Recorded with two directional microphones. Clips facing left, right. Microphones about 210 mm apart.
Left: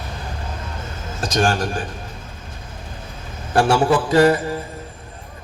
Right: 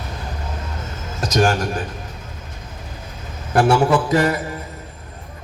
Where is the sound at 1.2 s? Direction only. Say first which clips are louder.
Right 2 dB; 30° left (ahead or behind).